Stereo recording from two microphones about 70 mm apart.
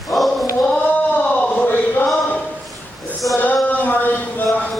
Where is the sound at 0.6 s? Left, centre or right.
Centre.